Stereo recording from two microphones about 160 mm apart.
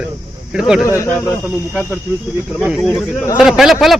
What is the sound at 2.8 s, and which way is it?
A man's voice, centre (ahead or behind).